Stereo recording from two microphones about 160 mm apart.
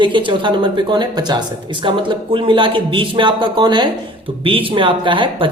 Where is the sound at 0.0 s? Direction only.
30° right (ahead or behind).